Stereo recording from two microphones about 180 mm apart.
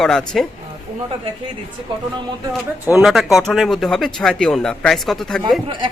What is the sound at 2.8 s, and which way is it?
Speech, centre (ahead or behind).